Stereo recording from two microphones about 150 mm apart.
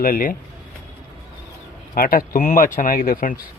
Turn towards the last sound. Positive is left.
turn(degrees=65)  # may be behind; listen again after turning